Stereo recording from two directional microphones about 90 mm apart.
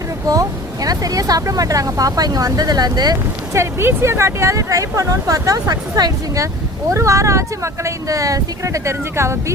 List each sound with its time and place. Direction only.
0.3 s speech: 45° right (ahead or behind)
3.5 s speech: 30° right (ahead or behind)